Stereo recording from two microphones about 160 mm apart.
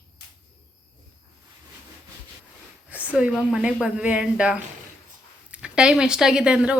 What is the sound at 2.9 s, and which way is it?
Speech, 5° right (ahead or behind).